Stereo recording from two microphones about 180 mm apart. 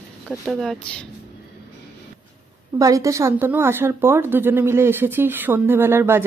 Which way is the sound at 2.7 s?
20° right (ahead or behind).